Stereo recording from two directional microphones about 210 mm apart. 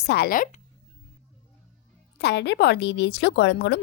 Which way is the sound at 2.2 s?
55° left (ahead or behind).